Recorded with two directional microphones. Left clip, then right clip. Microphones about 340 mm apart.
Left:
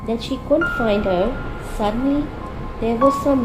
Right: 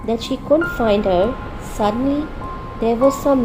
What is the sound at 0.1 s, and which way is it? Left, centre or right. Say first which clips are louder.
Speech: right 2 dB; centre.